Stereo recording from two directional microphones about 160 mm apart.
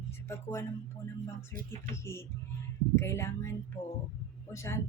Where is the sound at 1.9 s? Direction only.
15° left (ahead or behind).